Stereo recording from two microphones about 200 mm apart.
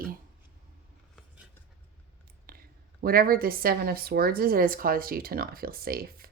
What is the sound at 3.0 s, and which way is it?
Speech, 50° right (ahead or behind).